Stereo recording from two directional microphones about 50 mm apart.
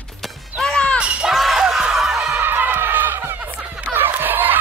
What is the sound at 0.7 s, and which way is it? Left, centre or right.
Music, centre.